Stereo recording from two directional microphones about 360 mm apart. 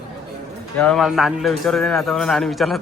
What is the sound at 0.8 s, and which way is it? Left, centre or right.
Mantra, centre.